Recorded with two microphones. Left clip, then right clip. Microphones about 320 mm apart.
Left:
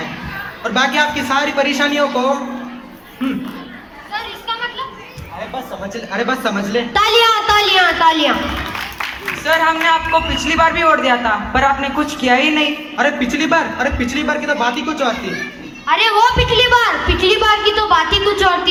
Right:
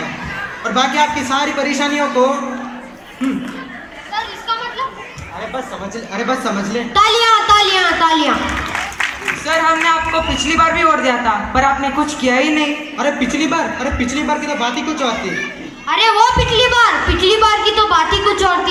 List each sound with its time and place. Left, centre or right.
0.6 s a man's voice: left
6.1 s a woman's voice: left
9.4 s a woman's voice: left